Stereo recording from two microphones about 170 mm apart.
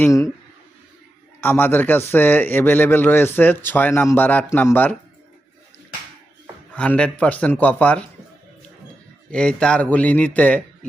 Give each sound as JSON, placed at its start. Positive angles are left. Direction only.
{"t": 0.0, "sound": "a man's voice", "side_deg": 15}
{"t": 1.4, "sound": "a man's voice", "side_deg": 10}
{"t": 6.7, "sound": "a man's voice", "side_deg": 5}
{"t": 9.3, "sound": "a man's voice", "side_deg": 5}